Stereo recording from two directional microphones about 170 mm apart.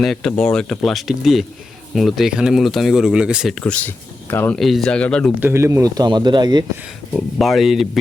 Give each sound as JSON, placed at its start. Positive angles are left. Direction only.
{"t": 0.0, "sound": "speech", "side_deg": 0}
{"t": 3.6, "sound": "speech", "side_deg": 10}
{"t": 5.4, "sound": "speech", "side_deg": -15}
{"t": 7.1, "sound": "speech", "side_deg": 0}